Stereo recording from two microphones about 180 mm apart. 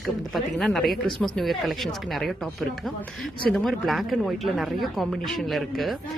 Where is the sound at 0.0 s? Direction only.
Centre (ahead or behind).